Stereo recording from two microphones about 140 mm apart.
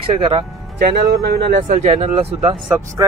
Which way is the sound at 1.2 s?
90° right.